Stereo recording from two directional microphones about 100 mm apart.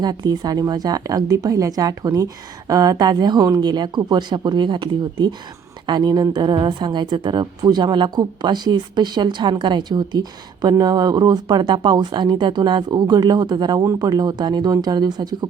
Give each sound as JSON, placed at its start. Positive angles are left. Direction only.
{"t": 0.0, "sound": "a woman's voice", "side_deg": -40}